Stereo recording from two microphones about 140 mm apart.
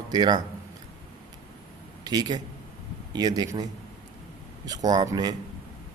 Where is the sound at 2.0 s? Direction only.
30° right (ahead or behind).